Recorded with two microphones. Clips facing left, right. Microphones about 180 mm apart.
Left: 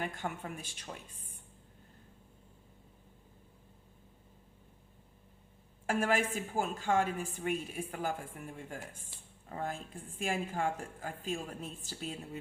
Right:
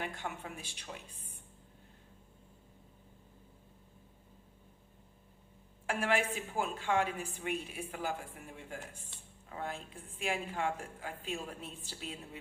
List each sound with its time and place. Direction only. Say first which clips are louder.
0.0 s a woman's voice: left 2 dB; 45° left (ahead or behind)
5.8 s a woman's voice: left 2 dB; 45° left (ahead or behind)